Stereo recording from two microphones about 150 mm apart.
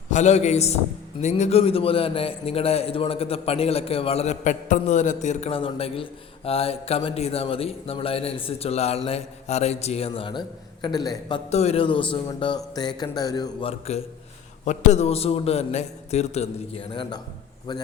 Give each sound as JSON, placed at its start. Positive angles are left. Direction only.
{"t": 0.1, "sound": "a man's voice", "side_deg": 50}
{"t": 10.8, "sound": "a sound", "side_deg": 25}
{"t": 11.5, "sound": "a man's voice", "side_deg": 45}
{"t": 13.0, "sound": "a sound", "side_deg": 25}
{"t": 13.7, "sound": "a man's voice", "side_deg": 45}
{"t": 16.9, "sound": "a man's voice", "side_deg": 30}